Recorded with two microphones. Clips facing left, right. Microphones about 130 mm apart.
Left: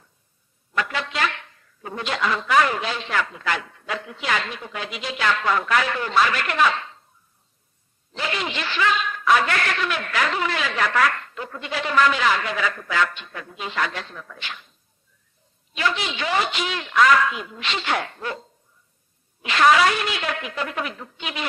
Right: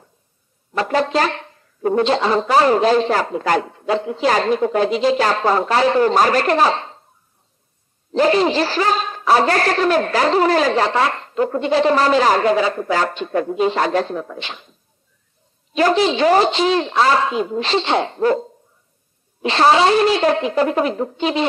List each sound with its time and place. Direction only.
0.7 s speech: 35° right (ahead or behind)
2.0 s a man's voice: 30° right (ahead or behind)
8.1 s a man's voice: 35° right (ahead or behind)
11.3 s a man's voice: 40° right (ahead or behind); by 14.7 s 25° right (ahead or behind)
15.7 s a man's voice: 35° right (ahead or behind)
18.2 s a man's voice: 40° right (ahead or behind)